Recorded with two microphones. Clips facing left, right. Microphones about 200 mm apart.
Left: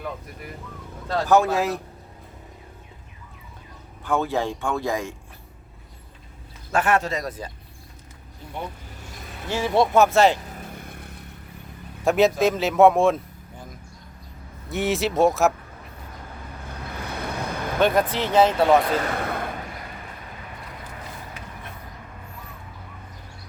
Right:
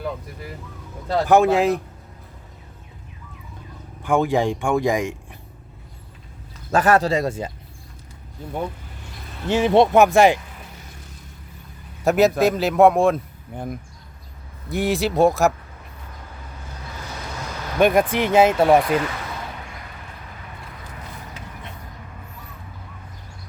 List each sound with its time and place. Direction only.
1.0 s speech: 20° right (ahead or behind)
4.0 s speech: 15° right (ahead or behind)
6.7 s speech: 40° right (ahead or behind)
9.5 s speech: 20° right (ahead or behind)
10.4 s vehicle: 45° left (ahead or behind)
12.0 s speech: centre (ahead or behind)
13.5 s speech: 60° right (ahead or behind)
14.7 s speech: centre (ahead or behind)
16.9 s vehicle: 60° left (ahead or behind)
17.7 s speech: 15° right (ahead or behind)
19.1 s a sound: 55° left (ahead or behind)